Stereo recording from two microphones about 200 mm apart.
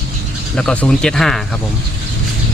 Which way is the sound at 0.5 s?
5° left (ahead or behind).